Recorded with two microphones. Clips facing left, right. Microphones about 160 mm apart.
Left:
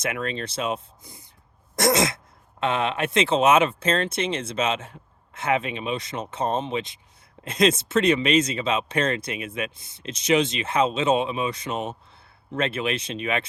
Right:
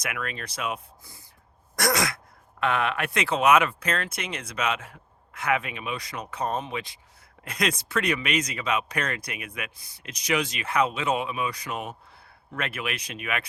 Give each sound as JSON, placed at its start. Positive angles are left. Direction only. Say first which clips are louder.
{"t": 0.0, "sound": "speech", "louder": "left 6 dB", "side_deg": 25}